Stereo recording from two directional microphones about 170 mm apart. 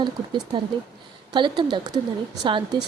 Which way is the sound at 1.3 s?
25° right (ahead or behind).